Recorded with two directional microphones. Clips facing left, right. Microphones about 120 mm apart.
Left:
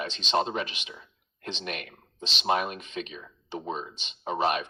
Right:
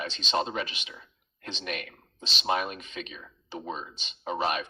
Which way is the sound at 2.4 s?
45° left (ahead or behind).